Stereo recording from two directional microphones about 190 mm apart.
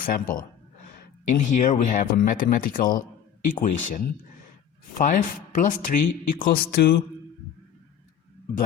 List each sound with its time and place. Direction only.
0.0 s speech: 45° left (ahead or behind)